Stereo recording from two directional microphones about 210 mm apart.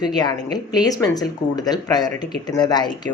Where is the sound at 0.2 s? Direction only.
20° left (ahead or behind).